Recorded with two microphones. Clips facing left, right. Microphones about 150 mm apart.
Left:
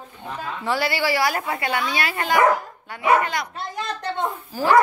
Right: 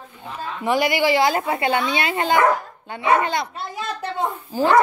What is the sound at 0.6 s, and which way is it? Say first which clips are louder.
A woman's voice: right 4 dB; 15° right (ahead or behind).